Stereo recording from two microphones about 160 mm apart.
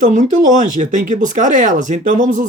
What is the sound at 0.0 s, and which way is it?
Speech, 50° right (ahead or behind).